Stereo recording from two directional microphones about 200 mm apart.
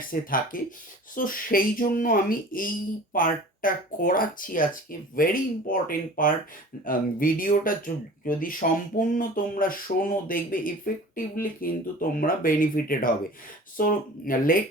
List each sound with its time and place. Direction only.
0.1 s speech: 45° left (ahead or behind)